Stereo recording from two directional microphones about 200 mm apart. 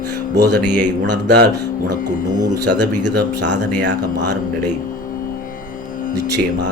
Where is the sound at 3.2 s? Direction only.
60° right (ahead or behind).